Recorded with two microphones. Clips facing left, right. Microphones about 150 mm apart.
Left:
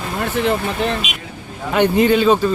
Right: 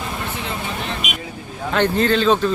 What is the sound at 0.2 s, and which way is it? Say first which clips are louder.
Speech: left 9 dB; 65° left (ahead or behind).